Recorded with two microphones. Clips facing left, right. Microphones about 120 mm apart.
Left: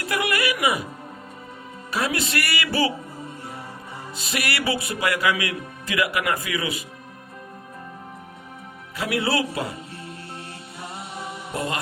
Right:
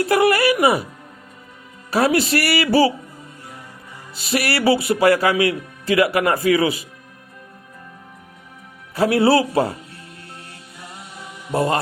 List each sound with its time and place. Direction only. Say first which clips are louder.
0.1 s speech: right 7 dB; 35° right (ahead or behind)
1.9 s speech: right 8 dB; 35° right (ahead or behind)
4.3 s speech: right 8 dB; 35° right (ahead or behind)
9.0 s speech: right 9 dB; 35° right (ahead or behind)
10.8 s mantra: left 4 dB; 25° left (ahead or behind)
11.5 s speech: right 9 dB; 35° right (ahead or behind)